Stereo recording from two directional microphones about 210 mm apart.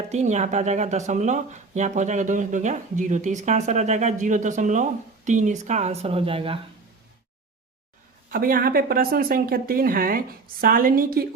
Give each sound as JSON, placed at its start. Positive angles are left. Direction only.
{"t": 0.1, "sound": "speech", "side_deg": -35}
{"t": 8.3, "sound": "speech", "side_deg": -45}